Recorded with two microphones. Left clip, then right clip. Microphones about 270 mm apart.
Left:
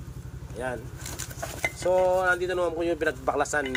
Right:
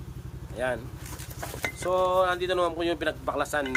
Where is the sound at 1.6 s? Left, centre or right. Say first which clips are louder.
Left 3 dB; centre.